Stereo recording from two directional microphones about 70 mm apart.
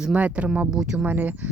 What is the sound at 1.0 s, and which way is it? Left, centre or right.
Speech, right.